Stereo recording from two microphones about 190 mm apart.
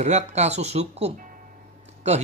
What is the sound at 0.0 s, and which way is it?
Speech, 35° right (ahead or behind).